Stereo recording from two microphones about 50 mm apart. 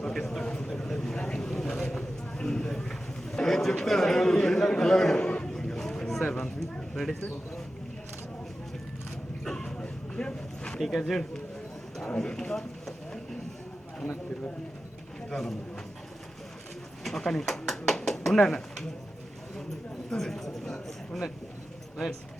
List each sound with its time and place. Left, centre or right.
0.0 s a man's voice: centre
0.7 s vehicle: centre
6.6 s a sound: centre
9.4 s bow-wow: centre
10.8 s speech: centre
15.3 s speech: centre
17.0 s speech: centre
20.1 s a man's voice: centre